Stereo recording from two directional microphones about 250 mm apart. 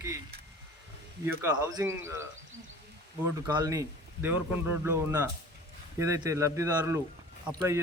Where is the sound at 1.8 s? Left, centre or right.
Centre.